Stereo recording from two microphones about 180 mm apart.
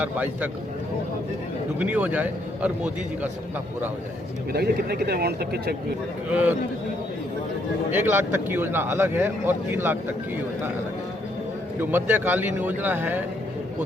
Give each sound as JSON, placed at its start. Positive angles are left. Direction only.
{"t": 0.0, "sound": "speech", "side_deg": -10}
{"t": 1.8, "sound": "speech", "side_deg": -10}
{"t": 4.5, "sound": "a man's voice", "side_deg": -60}
{"t": 6.3, "sound": "speech", "side_deg": -10}
{"t": 7.9, "sound": "speech", "side_deg": -10}
{"t": 11.8, "sound": "speech", "side_deg": -10}